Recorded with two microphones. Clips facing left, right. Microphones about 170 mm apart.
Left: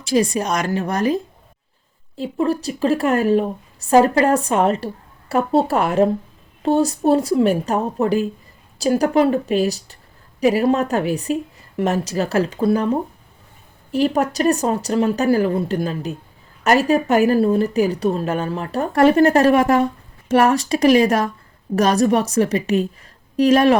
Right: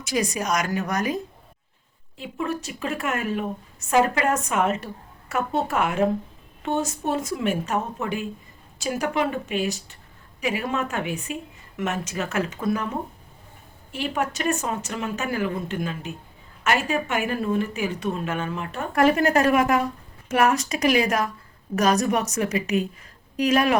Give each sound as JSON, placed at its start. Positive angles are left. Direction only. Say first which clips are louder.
{"t": 0.0, "sound": "a woman's voice", "louder": "left 7 dB", "side_deg": 30}